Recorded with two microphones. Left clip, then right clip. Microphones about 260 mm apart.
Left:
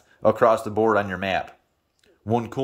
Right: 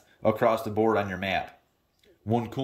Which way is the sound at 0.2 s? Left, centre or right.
Centre.